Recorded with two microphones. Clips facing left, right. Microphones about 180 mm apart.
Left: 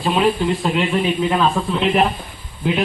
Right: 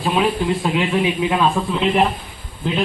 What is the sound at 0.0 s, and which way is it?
A man's voice, 5° right (ahead or behind).